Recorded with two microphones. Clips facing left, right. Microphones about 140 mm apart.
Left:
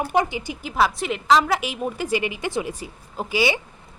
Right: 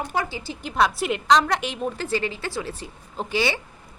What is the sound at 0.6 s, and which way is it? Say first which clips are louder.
A woman's voice: even; centre (ahead or behind).